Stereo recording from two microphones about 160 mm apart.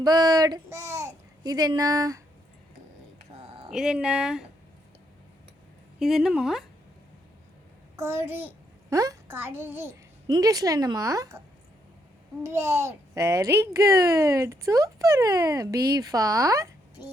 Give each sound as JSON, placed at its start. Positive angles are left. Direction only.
{"t": 0.0, "sound": "a child's voice", "side_deg": -25}
{"t": 3.3, "sound": "a sound", "side_deg": -40}
{"t": 3.7, "sound": "speech", "side_deg": -5}
{"t": 6.0, "sound": "speech", "side_deg": 0}
{"t": 7.9, "sound": "a child's voice", "side_deg": -15}